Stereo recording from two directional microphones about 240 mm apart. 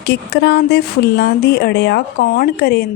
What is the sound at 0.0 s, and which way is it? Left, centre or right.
Speech, left.